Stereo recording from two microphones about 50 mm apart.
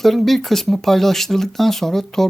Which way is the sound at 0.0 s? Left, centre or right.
Centre.